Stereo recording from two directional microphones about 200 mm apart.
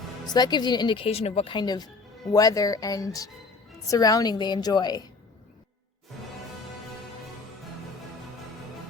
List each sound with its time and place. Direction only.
0.3 s speech: 20° left (ahead or behind)